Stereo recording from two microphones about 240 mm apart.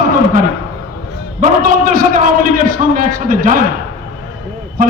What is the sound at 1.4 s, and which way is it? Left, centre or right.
A man's voice, right.